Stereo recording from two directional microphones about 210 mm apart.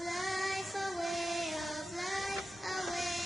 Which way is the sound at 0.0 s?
Centre (ahead or behind).